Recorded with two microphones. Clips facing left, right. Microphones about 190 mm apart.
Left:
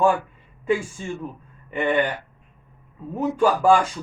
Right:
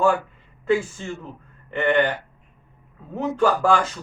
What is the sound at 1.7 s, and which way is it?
Speech, 10° left (ahead or behind).